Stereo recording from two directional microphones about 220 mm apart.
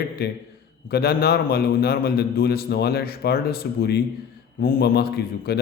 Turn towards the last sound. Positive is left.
turn(degrees=45)  # may be behind; listen again after turning